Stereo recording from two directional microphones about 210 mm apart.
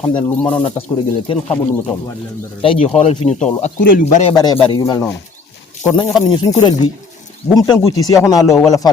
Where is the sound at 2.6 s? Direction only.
25° left (ahead or behind).